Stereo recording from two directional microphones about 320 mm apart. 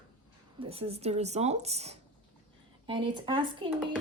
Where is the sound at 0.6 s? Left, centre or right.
Centre.